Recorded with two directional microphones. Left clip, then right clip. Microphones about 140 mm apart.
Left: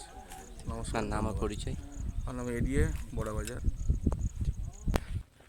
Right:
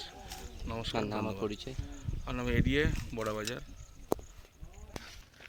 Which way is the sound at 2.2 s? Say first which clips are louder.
Right 3 dB; 25° right (ahead or behind).